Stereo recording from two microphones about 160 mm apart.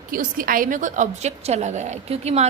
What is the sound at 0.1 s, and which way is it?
Speech, 60° right (ahead or behind).